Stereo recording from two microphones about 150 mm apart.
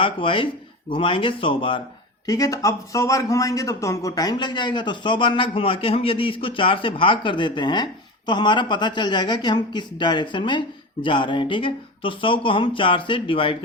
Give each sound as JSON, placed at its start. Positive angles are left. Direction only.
{"t": 0.0, "sound": "speech", "side_deg": 35}
{"t": 2.2, "sound": "speech", "side_deg": 25}